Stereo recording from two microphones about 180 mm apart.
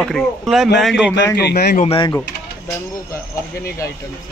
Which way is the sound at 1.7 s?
35° left (ahead or behind).